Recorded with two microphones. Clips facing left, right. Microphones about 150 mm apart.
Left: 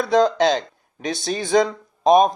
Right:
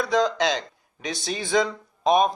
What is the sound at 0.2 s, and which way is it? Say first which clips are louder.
Speech: left 8 dB; 50° left (ahead or behind).